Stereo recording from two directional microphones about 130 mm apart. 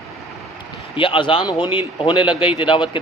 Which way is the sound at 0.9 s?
40° left (ahead or behind).